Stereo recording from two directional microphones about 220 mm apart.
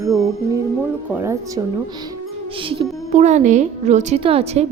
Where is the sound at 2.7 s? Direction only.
25° right (ahead or behind).